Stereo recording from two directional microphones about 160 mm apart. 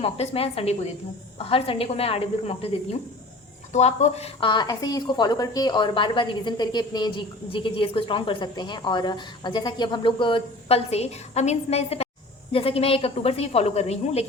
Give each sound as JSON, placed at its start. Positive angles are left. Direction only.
{"t": 0.0, "sound": "a woman's voice", "side_deg": 40}